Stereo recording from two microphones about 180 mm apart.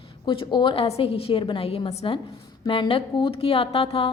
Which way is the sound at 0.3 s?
25° left (ahead or behind).